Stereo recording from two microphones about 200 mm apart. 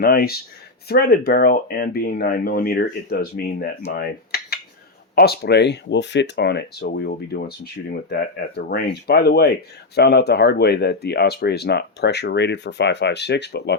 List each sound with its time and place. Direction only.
0.0 s speech: 50° left (ahead or behind)
3.9 s cutlery: 50° left (ahead or behind)
5.1 s speech: 55° left (ahead or behind)